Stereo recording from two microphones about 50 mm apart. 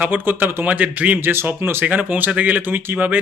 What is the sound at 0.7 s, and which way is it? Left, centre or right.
Speech, right.